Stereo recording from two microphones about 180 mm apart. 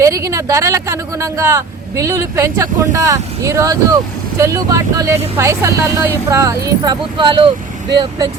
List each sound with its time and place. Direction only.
0.0 s speech: 15° right (ahead or behind)